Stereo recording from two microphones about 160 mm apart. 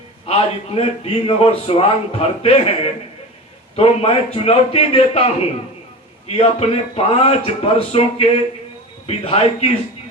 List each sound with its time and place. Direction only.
0.3 s a man's voice: 35° left (ahead or behind)